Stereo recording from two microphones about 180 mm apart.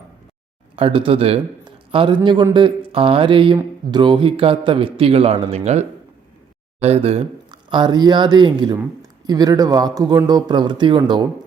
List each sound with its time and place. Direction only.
0.8 s speech: 30° right (ahead or behind)